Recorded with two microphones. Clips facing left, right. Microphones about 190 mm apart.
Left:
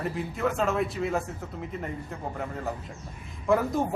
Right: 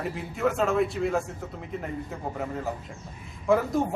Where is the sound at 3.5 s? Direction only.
Centre (ahead or behind).